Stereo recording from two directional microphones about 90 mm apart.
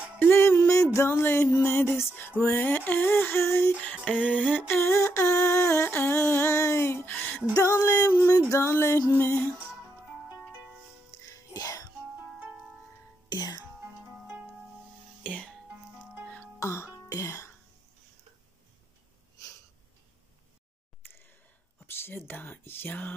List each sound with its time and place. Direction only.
0.3 s music: 25° left (ahead or behind)
0.9 s a sound: 30° left (ahead or behind)
7.5 s female singing: 30° left (ahead or behind)
9.1 s a sound: 25° left (ahead or behind)
11.2 s music: 40° left (ahead or behind)
13.3 s music: 50° left (ahead or behind)
15.2 s music: 15° left (ahead or behind)
16.5 s music: 30° left (ahead or behind)
21.0 s a sound: 25° left (ahead or behind)
21.7 s whispering: 25° left (ahead or behind)